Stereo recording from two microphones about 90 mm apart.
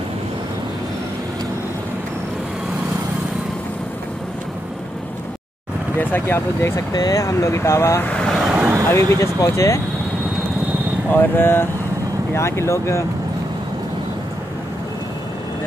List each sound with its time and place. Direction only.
5.9 s speech: 25° left (ahead or behind)
6.9 s speech: 45° left (ahead or behind)
8.1 s speech: 10° left (ahead or behind)
8.4 s vehicle: 5° right (ahead or behind)
8.8 s speech: 35° left (ahead or behind)
11.1 s speech: 25° left (ahead or behind)